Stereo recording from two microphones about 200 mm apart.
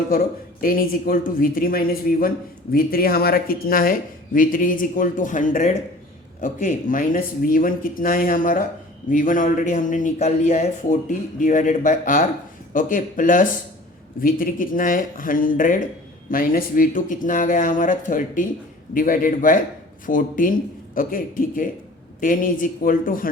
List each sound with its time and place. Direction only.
0.6 s a man's voice: 45° left (ahead or behind)